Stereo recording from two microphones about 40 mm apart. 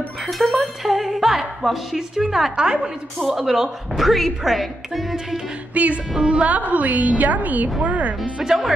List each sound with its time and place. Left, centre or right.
0.3 s a sound: centre
2.5 s a woman's voice: right
4.0 s a woman's voice: centre
5.8 s a woman's voice: right
8.4 s speech: centre